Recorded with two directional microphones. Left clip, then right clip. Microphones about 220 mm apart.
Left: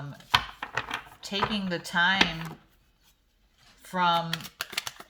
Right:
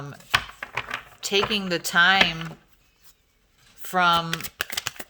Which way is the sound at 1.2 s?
45° right (ahead or behind).